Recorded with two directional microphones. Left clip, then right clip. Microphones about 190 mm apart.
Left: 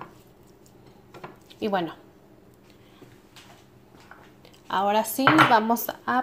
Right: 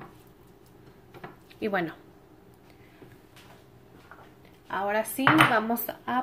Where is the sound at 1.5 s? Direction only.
5° left (ahead or behind).